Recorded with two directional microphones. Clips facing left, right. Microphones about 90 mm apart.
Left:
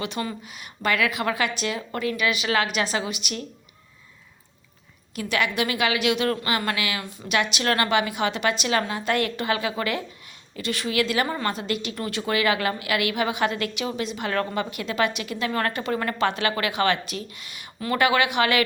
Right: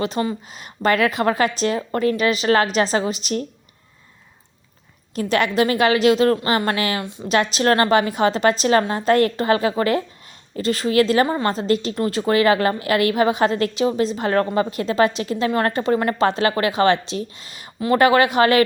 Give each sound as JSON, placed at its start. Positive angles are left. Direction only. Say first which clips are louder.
{"t": 0.0, "sound": "speech", "louder": "right 7 dB", "side_deg": -30}
{"t": 5.1, "sound": "speech", "louder": "right 6 dB", "side_deg": -35}
{"t": 7.0, "sound": "speech", "louder": "right 7 dB", "side_deg": -20}
{"t": 7.3, "sound": "speech", "louder": "right 6 dB", "side_deg": -35}